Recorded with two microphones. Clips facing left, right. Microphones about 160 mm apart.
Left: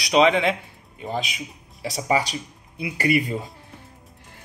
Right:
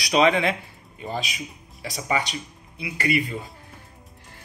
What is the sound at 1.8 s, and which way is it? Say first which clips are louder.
Speech: left 4 dB; 30° left (ahead or behind).